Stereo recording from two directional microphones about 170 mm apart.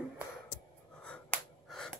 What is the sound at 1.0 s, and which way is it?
Finger snapping, 5° left (ahead or behind).